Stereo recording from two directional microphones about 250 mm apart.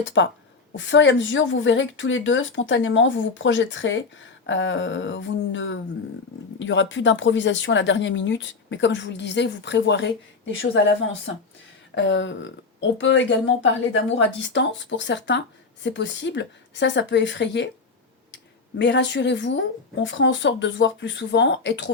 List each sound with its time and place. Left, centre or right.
0.0 s a woman's voice: left
11.9 s a woman's voice: left
18.8 s a woman's voice: left